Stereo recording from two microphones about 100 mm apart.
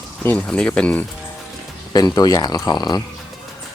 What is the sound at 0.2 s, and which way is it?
Speech, 20° left (ahead or behind).